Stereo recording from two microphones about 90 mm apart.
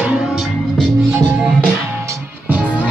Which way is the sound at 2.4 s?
15° right (ahead or behind).